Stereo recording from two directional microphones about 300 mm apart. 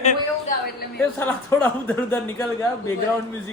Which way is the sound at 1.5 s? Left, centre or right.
Centre.